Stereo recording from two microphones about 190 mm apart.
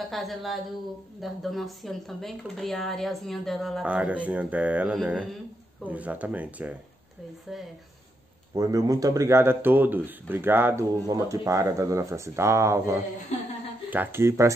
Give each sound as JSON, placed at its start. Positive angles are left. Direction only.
{"t": 0.1, "sound": "speech", "side_deg": 0}
{"t": 8.5, "sound": "speech", "side_deg": -20}